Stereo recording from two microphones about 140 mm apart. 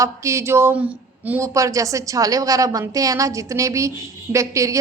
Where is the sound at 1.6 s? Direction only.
25° right (ahead or behind).